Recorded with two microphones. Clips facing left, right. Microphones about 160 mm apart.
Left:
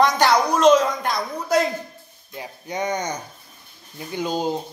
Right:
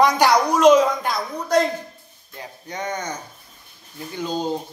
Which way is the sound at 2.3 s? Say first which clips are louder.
Left 3 dB; 15° left (ahead or behind).